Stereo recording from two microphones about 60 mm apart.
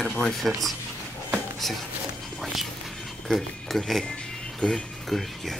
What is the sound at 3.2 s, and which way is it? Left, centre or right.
Speech, centre.